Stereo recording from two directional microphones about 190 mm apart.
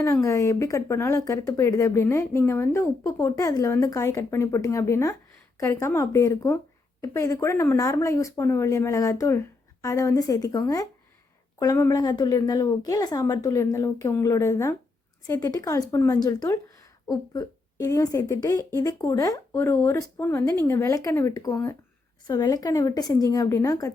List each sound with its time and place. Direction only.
0.0 s a woman's voice: 15° left (ahead or behind)